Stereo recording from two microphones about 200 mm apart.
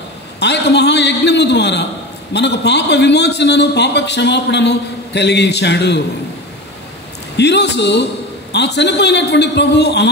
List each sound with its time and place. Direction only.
0.4 s a man's voice: 60° left (ahead or behind)
7.3 s a man's voice: 60° left (ahead or behind)